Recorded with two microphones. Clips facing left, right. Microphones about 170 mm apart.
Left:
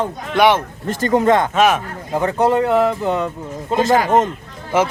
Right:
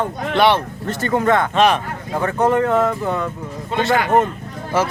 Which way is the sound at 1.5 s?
5° left (ahead or behind).